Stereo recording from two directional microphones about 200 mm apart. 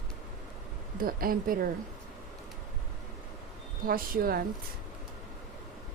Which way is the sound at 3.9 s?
45° right (ahead or behind).